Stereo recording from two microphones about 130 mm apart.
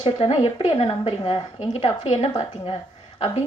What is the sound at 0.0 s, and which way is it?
A woman's voice, 45° left (ahead or behind).